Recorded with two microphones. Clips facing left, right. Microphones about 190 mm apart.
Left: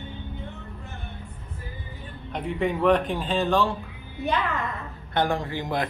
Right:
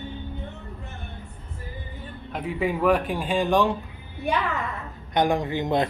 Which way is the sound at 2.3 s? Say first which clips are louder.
Even; 5° right (ahead or behind).